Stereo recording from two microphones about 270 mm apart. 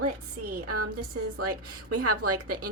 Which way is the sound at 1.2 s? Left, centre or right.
Right.